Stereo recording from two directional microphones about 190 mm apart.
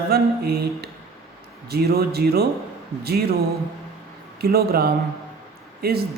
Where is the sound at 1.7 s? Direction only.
55° right (ahead or behind).